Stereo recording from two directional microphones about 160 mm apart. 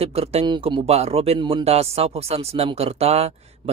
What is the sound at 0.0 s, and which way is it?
A man's voice, 40° right (ahead or behind).